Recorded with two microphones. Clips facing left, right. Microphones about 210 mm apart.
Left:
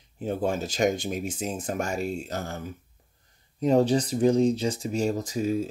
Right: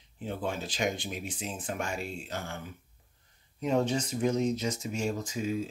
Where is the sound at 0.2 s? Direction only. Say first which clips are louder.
Left 7 dB; 45° left (ahead or behind).